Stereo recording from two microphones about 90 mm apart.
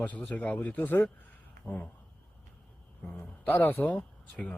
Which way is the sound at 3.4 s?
20° left (ahead or behind).